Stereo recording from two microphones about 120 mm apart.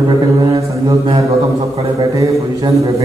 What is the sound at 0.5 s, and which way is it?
Mantra, 30° right (ahead or behind).